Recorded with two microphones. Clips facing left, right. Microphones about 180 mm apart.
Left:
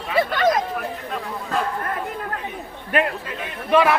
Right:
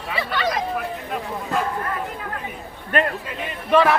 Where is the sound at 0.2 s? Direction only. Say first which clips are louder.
Left 6 dB; 45° left (ahead or behind).